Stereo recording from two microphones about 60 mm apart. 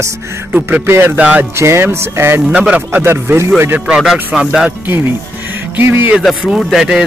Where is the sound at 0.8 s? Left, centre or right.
Right.